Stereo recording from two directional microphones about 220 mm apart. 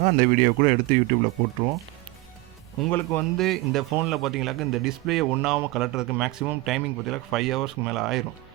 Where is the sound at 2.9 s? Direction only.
10° left (ahead or behind).